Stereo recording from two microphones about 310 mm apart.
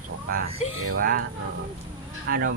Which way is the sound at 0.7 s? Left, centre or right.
Right.